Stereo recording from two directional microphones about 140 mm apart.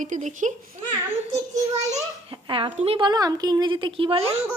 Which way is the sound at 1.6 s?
55° right (ahead or behind).